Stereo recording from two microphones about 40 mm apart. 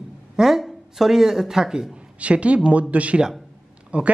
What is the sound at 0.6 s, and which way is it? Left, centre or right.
Speech, centre.